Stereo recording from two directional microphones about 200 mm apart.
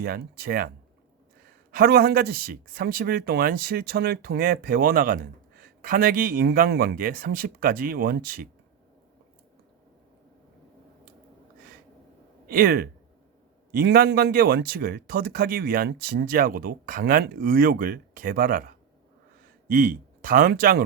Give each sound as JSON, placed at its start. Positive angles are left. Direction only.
{"t": 0.0, "sound": "a man's voice", "side_deg": -50}
{"t": 1.7, "sound": "a man's voice", "side_deg": -50}
{"t": 12.5, "sound": "a man's voice", "side_deg": -45}
{"t": 19.6, "sound": "speech", "side_deg": -45}